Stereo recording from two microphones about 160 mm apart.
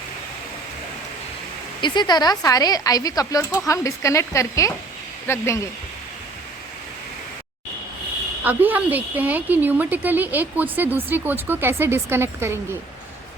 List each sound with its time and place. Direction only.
1.8 s speech: 30° left (ahead or behind)
8.4 s a woman's voice: 10° right (ahead or behind)